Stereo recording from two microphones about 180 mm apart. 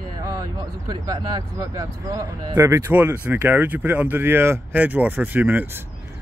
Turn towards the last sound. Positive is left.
turn(degrees=-10)  # may be behind; listen again after turning